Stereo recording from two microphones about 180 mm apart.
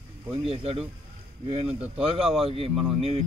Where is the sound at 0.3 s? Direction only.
35° right (ahead or behind).